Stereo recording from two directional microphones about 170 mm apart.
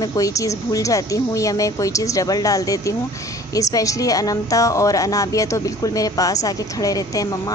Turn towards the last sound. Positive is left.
turn(degrees=20)  # may be behind; listen again after turning